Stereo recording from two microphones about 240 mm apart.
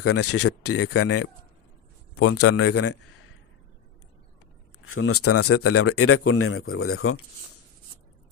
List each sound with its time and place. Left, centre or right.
0.0 s speech: left
0.8 s a man's voice: left
2.1 s speech: left
4.8 s speech: left